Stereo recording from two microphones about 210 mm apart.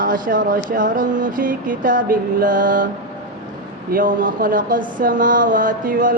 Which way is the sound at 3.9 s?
40° right (ahead or behind).